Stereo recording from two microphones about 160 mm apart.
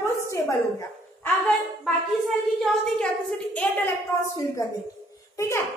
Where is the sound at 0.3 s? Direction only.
20° left (ahead or behind).